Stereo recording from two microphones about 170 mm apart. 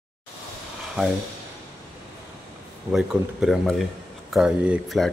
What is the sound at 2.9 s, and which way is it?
Speech, 5° right (ahead or behind).